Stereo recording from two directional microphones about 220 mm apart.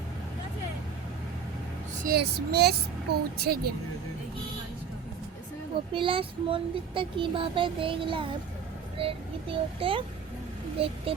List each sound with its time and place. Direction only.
2.0 s speech: 45° right (ahead or behind)
5.9 s speech: 25° right (ahead or behind)